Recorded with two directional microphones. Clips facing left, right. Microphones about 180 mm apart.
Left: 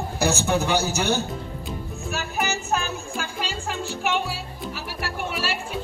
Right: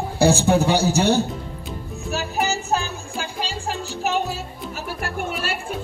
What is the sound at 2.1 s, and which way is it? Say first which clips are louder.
Music: right 4 dB; 35° right (ahead or behind).